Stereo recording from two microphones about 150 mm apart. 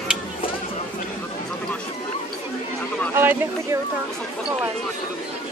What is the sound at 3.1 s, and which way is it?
Speech, 15° right (ahead or behind).